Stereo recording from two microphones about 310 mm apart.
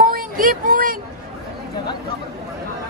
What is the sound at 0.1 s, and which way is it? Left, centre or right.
Speech, right.